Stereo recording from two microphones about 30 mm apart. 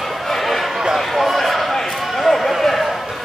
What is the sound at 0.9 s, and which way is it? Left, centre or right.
Basketball bounce, centre.